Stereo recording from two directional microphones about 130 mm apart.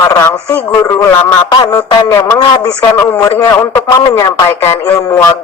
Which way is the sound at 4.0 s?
30° left (ahead or behind).